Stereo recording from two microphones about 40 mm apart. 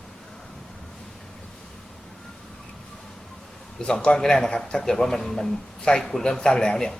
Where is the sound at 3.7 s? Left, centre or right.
Centre.